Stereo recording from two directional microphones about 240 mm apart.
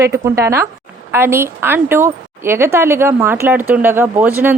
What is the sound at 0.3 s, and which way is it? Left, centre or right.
Speech, centre.